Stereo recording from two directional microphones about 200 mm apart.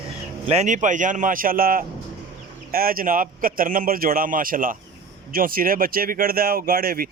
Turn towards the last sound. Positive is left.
turn(degrees=-45)  # may be behind; listen again after turning